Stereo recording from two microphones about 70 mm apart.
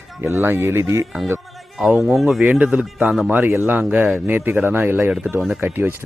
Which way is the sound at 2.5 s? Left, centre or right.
Centre.